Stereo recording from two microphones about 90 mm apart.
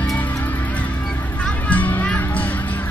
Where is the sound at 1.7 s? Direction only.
20° left (ahead or behind).